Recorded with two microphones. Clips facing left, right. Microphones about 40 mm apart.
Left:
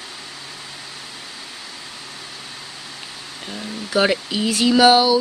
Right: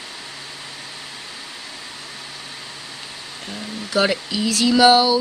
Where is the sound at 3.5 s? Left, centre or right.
Centre.